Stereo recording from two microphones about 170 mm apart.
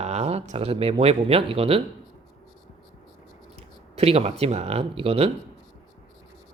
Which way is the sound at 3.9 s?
35° right (ahead or behind).